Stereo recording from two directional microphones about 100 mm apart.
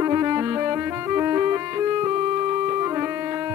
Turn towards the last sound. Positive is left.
turn(degrees=-30)  # may be behind; listen again after turning